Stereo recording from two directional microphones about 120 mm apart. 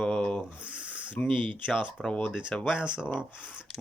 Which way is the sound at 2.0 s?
10° left (ahead or behind).